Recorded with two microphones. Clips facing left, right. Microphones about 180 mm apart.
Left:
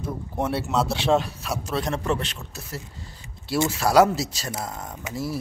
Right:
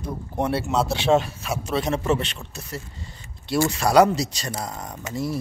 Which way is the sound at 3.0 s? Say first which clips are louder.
Right 1 dB; centre (ahead or behind).